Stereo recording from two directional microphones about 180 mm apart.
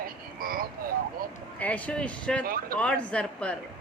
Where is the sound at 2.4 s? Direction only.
55° right (ahead or behind).